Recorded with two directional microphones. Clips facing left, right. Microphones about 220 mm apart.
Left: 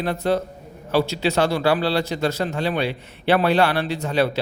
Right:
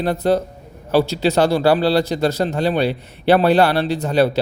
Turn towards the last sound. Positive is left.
turn(degrees=-35)  # may be behind; listen again after turning